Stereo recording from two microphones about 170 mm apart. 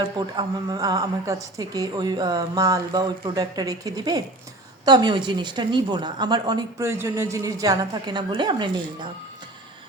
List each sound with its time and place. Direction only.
0.0 s a woman's voice: 25° right (ahead or behind)